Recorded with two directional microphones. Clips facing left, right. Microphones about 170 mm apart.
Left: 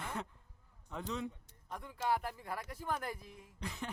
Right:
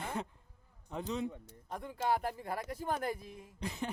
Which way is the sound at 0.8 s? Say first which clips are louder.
Right 4 dB; 25° right (ahead or behind).